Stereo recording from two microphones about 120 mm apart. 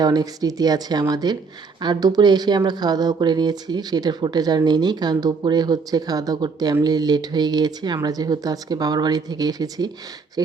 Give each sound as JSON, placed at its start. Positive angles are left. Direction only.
{"t": 0.0, "sound": "speech", "side_deg": -35}